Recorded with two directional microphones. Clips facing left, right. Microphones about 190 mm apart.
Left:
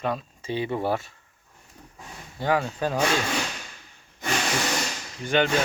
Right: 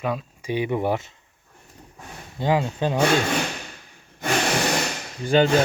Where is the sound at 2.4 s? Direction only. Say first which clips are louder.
Right 2 dB; 20° right (ahead or behind).